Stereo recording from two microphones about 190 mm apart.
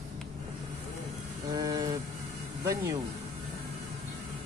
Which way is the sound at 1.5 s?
20° right (ahead or behind).